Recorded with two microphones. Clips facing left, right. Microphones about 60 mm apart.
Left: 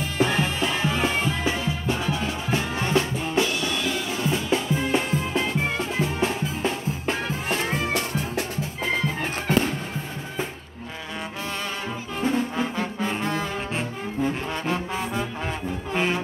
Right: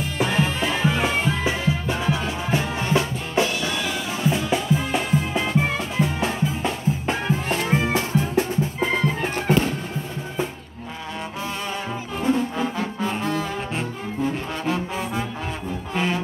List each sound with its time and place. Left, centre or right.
0.0 s music: centre
1.4 s music: centre
12.2 s brass instrument: centre
15.9 s brass instrument: centre